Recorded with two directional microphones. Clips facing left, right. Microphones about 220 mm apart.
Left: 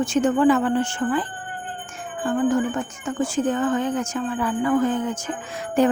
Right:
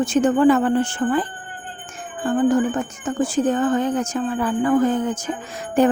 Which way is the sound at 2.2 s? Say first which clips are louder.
Right 3 dB; 35° right (ahead or behind).